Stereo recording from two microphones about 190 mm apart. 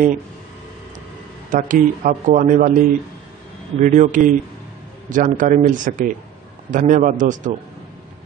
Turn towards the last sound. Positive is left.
turn(degrees=-40)  # may be behind; listen again after turning